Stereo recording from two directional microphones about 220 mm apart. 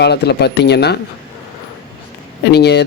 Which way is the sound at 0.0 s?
50° left (ahead or behind).